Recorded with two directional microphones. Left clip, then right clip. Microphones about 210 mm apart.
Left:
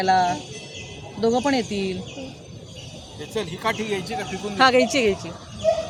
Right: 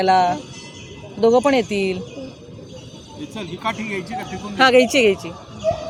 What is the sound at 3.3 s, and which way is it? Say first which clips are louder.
Speech: left 1 dB; 45° left (ahead or behind).